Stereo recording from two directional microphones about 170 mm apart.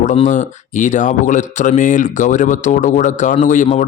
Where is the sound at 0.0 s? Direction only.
45° left (ahead or behind).